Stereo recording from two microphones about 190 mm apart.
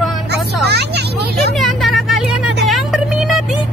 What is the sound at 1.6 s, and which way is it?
Vehicle, centre (ahead or behind).